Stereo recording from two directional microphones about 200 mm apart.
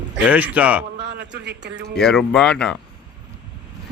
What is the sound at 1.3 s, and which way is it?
Speech, 60° right (ahead or behind).